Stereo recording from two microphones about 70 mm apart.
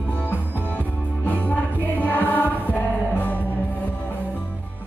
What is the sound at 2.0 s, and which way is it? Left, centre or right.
Music, left.